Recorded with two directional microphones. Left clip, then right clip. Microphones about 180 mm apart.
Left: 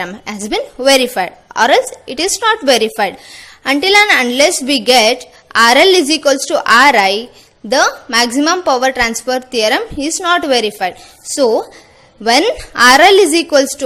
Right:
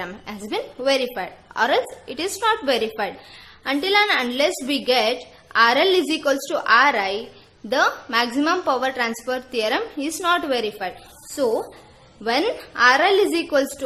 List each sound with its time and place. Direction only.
0.0 s a woman's voice: 35° left (ahead or behind)